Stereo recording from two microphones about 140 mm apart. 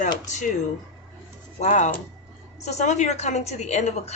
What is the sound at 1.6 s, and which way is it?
A woman's voice, 60° left (ahead or behind).